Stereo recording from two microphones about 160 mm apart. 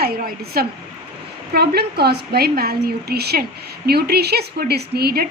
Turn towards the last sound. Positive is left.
turn(degrees=-75)  # may be behind; listen again after turning